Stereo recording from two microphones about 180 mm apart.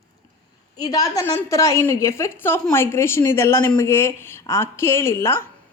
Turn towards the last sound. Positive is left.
turn(degrees=15)  # may be behind; listen again after turning